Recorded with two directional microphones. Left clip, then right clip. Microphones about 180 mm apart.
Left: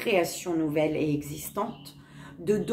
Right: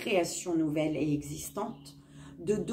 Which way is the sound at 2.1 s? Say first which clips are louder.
Left 5 dB; 15° left (ahead or behind).